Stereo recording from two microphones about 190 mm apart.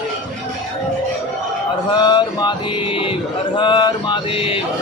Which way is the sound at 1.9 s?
25° left (ahead or behind).